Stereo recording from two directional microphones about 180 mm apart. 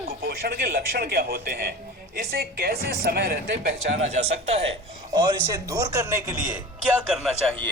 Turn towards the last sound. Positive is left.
turn(degrees=5)  # may be behind; listen again after turning